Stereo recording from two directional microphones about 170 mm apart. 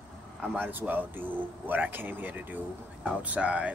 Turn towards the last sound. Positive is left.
turn(degrees=-10)  # may be behind; listen again after turning